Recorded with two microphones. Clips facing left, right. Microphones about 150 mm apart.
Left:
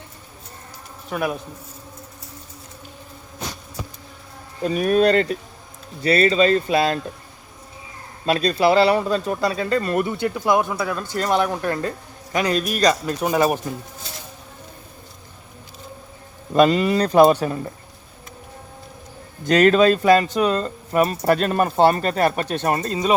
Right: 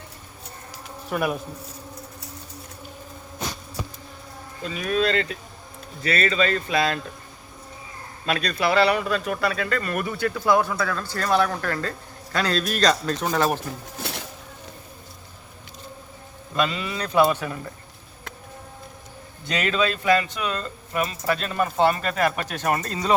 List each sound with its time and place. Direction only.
1.1 s speech: centre (ahead or behind)
4.6 s speech: 50° left (ahead or behind)
8.3 s speech: 30° left (ahead or behind); by 13.6 s 10° left (ahead or behind)
16.6 s speech: 45° left (ahead or behind)
19.5 s speech: 45° left (ahead or behind)
21.8 s speech: 35° left (ahead or behind); by 23.1 s 20° left (ahead or behind)